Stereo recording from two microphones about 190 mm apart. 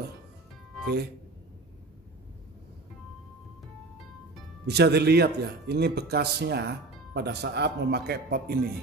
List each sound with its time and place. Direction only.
4.6 s a man's voice: 60° right (ahead or behind)